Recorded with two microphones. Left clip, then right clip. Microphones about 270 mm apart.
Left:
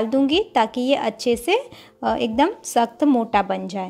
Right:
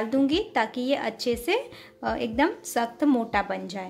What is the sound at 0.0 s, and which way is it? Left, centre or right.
A woman's voice, centre.